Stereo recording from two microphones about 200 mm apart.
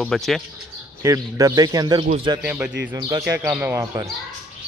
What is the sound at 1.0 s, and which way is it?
Speech, 15° right (ahead or behind).